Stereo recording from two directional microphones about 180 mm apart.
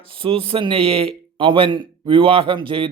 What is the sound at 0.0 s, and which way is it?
A man's voice, 30° right (ahead or behind).